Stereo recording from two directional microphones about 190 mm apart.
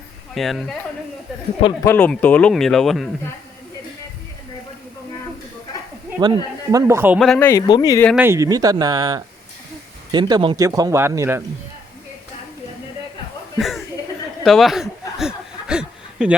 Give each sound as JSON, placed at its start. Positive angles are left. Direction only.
{"t": 0.3, "sound": "speech", "side_deg": 0}
{"t": 1.8, "sound": "speech", "side_deg": 10}
{"t": 6.1, "sound": "speech", "side_deg": -20}
{"t": 7.2, "sound": "speech", "side_deg": 5}
{"t": 8.1, "sound": "speech", "side_deg": -10}
{"t": 13.6, "sound": "chuckle", "side_deg": 0}
{"t": 14.4, "sound": "a sound", "side_deg": 0}